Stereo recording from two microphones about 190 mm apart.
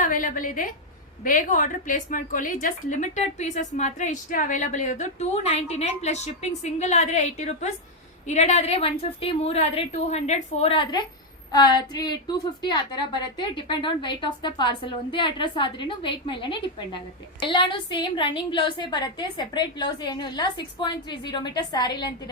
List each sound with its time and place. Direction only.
0.0 s a woman's voice: 45° left (ahead or behind); by 22.1 s 20° left (ahead or behind)